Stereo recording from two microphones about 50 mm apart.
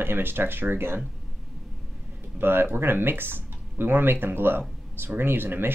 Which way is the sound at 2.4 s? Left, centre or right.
Right.